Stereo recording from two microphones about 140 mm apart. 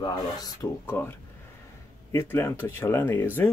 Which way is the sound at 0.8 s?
15° left (ahead or behind).